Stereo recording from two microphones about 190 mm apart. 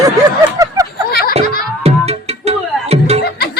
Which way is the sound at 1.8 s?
35° right (ahead or behind).